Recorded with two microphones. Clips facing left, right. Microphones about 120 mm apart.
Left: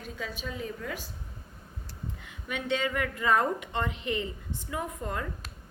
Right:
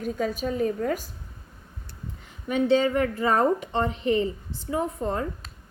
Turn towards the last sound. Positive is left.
turn(degrees=-30)  # may be behind; listen again after turning